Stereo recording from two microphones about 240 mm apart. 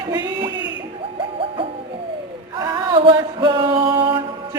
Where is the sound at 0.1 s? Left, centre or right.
Centre.